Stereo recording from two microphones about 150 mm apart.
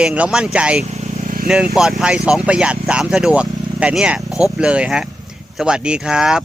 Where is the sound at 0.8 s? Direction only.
45° right (ahead or behind).